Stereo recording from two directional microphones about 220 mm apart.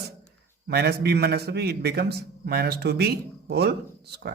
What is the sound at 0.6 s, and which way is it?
Speech, 50° right (ahead or behind).